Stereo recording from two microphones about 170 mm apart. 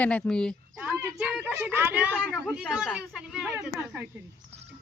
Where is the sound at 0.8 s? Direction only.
10° right (ahead or behind).